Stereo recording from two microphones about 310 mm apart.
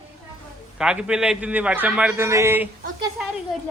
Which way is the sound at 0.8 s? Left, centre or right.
Centre.